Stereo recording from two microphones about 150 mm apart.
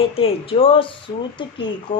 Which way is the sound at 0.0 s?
40° left (ahead or behind).